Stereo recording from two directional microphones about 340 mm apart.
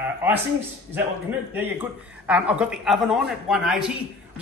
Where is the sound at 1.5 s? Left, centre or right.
Centre.